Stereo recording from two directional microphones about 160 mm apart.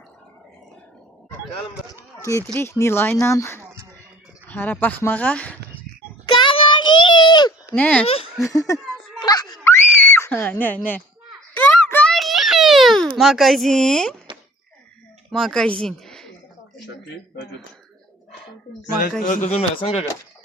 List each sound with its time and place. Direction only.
2.5 s speech: 15° left (ahead or behind)
6.2 s child singing: 30° left (ahead or behind)
7.8 s speech: 10° left (ahead or behind)
8.4 s speech: 20° left (ahead or behind)
9.2 s a sound: 25° left (ahead or behind)
12.1 s a sound: centre (ahead or behind)
13.1 s speech: centre (ahead or behind)
15.3 s speech: 5° left (ahead or behind)
19.2 s speech: 55° left (ahead or behind)